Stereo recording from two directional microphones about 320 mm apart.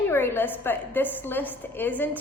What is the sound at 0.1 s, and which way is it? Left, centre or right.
A woman's voice, centre.